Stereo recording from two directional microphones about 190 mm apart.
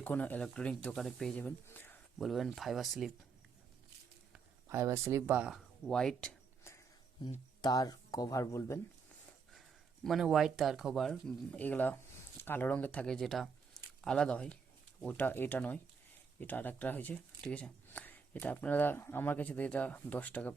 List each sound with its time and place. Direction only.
0.0 s speech: 10° left (ahead or behind)
2.1 s speech: centre (ahead or behind)
4.3 s a sound: 15° right (ahead or behind); by 6.7 s 5° left (ahead or behind)
7.3 s speech: 20° left (ahead or behind)
9.6 s speech: centre (ahead or behind)